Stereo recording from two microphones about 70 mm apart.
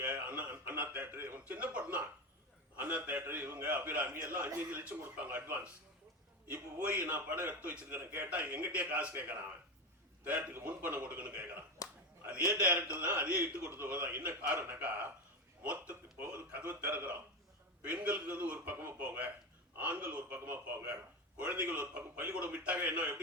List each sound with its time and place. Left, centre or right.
0.0 s a man's voice: right
1.5 s a man's voice: right
6.8 s a man's voice: right